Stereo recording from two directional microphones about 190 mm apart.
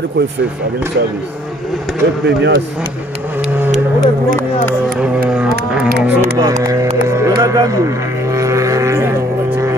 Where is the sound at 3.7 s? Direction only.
45° right (ahead or behind).